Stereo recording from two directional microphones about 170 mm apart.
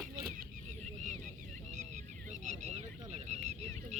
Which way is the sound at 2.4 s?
40° right (ahead or behind).